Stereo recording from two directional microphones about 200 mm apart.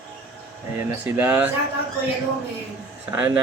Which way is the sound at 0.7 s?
10° right (ahead or behind).